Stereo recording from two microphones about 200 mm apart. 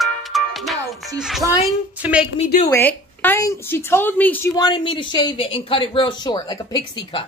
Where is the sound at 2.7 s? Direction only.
10° left (ahead or behind).